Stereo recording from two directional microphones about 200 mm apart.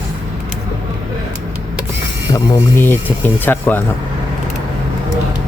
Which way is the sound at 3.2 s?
10° left (ahead or behind).